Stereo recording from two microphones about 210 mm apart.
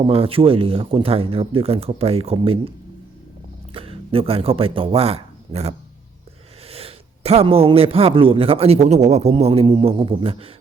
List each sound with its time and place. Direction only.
0.1 s speech: 25° right (ahead or behind)
3.8 s speech: 25° right (ahead or behind)